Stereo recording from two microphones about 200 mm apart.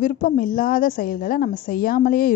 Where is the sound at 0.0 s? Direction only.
45° left (ahead or behind).